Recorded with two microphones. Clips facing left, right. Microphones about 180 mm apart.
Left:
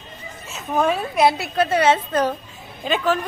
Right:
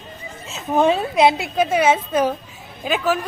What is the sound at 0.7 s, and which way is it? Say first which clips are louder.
Speech: right 3 dB; 25° right (ahead or behind).